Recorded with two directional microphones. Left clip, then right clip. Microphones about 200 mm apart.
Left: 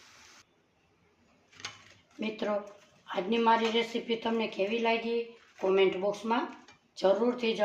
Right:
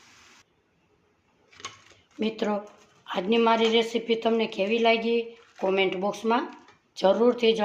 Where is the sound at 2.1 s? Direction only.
40° right (ahead or behind).